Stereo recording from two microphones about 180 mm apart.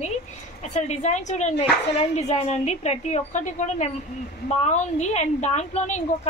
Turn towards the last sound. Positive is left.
turn(degrees=40)  # may be behind; listen again after turning